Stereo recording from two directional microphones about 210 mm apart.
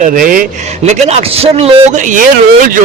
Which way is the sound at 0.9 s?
30° right (ahead or behind).